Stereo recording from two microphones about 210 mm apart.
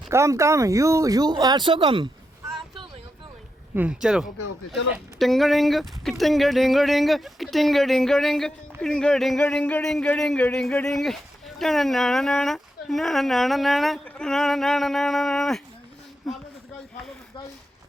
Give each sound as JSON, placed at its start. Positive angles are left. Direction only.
{"t": 0.1, "sound": "speech", "side_deg": -15}
{"t": 3.8, "sound": "speech", "side_deg": -5}